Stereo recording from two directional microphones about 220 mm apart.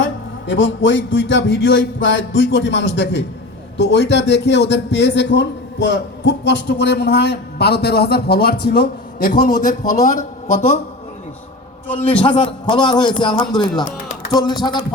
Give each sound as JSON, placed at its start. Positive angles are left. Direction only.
{"t": 0.0, "sound": "a man's voice", "side_deg": 60}
{"t": 11.9, "sound": "a man's voice", "side_deg": 25}